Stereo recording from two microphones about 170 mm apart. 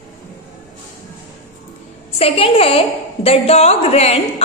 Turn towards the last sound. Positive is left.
turn(degrees=35)  # may be behind; listen again after turning